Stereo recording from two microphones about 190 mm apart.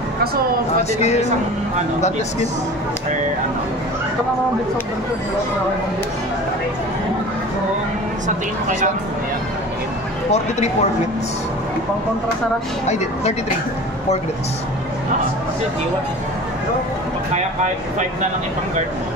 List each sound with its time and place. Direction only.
0.9 s speech: 35° left (ahead or behind)
10.3 s speech: 35° left (ahead or behind)
12.8 s speech: 35° left (ahead or behind)